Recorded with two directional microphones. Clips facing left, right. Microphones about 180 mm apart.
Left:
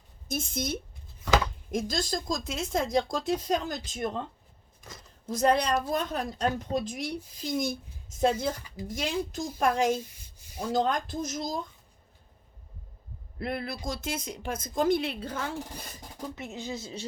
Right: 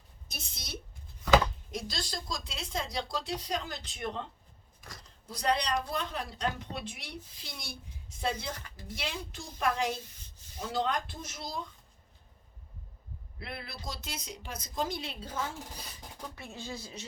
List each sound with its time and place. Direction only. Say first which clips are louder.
0.3 s speech: left 13 dB; 50° left (ahead or behind)
5.2 s speech: left 6 dB; 45° left (ahead or behind)
13.4 s speech: left 9 dB; 50° left (ahead or behind)
16.3 s speech: left 6 dB; 20° left (ahead or behind)